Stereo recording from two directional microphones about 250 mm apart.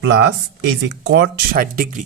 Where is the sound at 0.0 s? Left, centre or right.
Right.